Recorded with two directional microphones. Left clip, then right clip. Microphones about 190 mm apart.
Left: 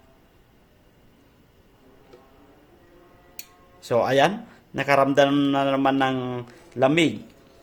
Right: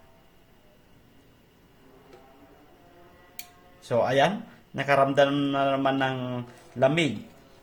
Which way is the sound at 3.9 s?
50° left (ahead or behind).